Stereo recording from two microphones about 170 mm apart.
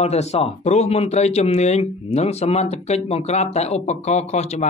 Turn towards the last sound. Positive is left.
turn(degrees=40)  # may be behind; listen again after turning